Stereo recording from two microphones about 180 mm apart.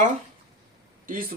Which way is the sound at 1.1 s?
50° right (ahead or behind).